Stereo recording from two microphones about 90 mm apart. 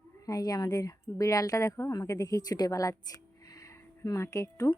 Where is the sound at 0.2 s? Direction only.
40° left (ahead or behind).